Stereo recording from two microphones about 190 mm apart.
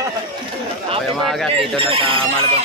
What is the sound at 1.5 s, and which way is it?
Speech, 30° right (ahead or behind).